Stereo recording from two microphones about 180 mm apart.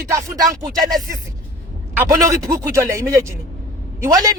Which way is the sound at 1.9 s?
15° right (ahead or behind).